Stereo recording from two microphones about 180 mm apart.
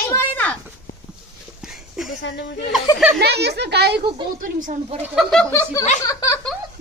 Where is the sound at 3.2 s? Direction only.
65° right (ahead or behind).